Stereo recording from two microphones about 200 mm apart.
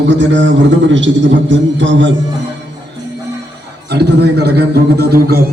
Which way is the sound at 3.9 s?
55° right (ahead or behind).